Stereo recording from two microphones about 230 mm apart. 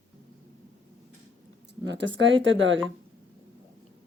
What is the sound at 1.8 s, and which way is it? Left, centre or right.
Speech, right.